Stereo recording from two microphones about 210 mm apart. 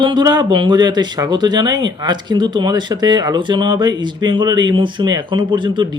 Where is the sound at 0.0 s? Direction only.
20° right (ahead or behind).